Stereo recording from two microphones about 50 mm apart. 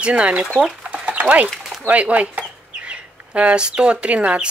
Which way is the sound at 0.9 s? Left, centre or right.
Right.